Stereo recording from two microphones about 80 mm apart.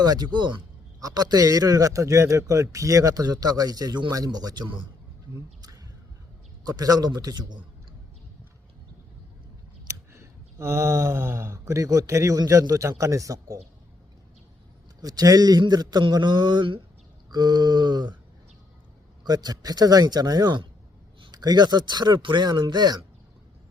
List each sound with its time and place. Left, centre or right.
0.0 s speech: right
1.0 s a man's voice: right
6.7 s speech: right
9.8 s a sound: right
12.5 s a man's voice: right
15.0 s speech: right
17.3 s speech: right
19.2 s speech: right